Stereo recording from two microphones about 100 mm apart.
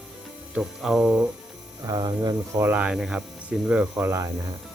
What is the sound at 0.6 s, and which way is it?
Music, 5° right (ahead or behind).